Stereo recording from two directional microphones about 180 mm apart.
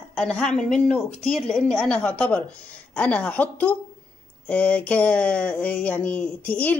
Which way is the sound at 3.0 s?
5° left (ahead or behind).